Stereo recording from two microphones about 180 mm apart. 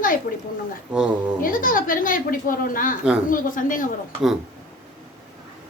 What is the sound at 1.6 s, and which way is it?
A woman's voice, 50° left (ahead or behind).